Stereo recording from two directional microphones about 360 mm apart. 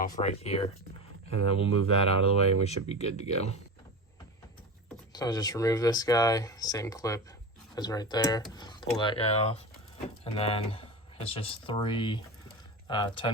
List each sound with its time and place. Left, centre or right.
0.0 s speech: centre
1.3 s speech: right
1.9 s speech: centre
5.1 s speech: centre